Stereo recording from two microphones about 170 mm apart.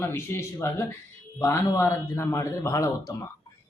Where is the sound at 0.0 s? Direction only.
15° left (ahead or behind).